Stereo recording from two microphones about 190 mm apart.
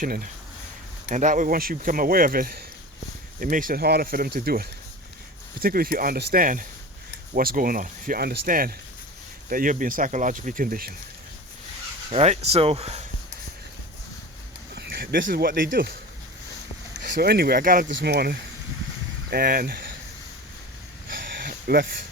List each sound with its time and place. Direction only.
0.0 s speech: 50° right (ahead or behind)
12.1 s speech: 35° right (ahead or behind)
14.8 s a sound: 50° right (ahead or behind)
15.3 s speech: 50° right (ahead or behind)
17.2 s speech: 55° right (ahead or behind)
17.8 s speech: 65° right (ahead or behind)
21.3 s a sound: 50° right (ahead or behind)